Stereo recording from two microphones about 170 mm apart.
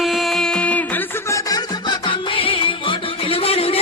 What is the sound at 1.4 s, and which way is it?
Music, 25° left (ahead or behind).